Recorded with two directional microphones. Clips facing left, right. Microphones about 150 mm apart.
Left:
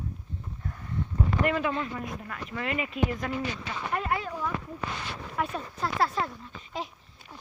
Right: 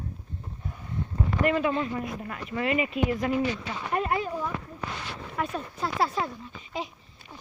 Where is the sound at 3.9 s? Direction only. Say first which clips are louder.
Right 4 dB; 20° right (ahead or behind).